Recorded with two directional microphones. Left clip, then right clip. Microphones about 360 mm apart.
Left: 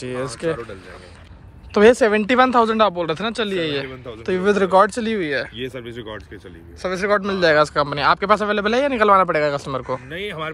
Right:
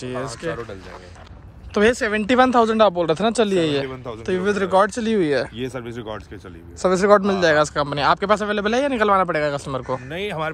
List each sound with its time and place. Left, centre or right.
0.0 s speech: centre
1.7 s speech: centre
10.0 s speech: right